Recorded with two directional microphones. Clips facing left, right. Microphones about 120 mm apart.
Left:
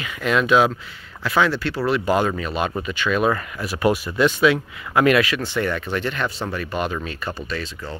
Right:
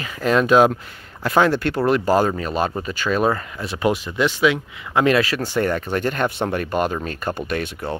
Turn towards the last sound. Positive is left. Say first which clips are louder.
# right 5 dB
turn(degrees=-60)  # may be behind; listen again after turning